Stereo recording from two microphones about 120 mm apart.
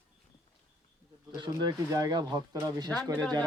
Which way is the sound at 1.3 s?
35° right (ahead or behind).